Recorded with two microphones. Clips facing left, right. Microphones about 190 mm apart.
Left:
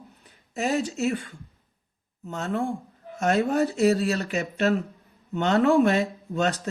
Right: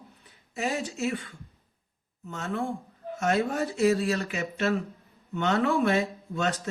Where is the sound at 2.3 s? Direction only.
40° left (ahead or behind).